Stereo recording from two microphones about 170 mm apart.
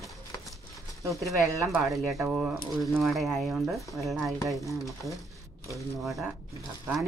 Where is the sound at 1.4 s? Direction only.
20° right (ahead or behind).